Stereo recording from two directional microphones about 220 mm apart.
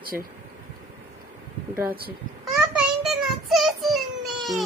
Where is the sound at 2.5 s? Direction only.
Centre (ahead or behind).